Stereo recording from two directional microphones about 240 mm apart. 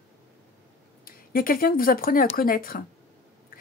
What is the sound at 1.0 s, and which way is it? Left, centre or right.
Speech, left.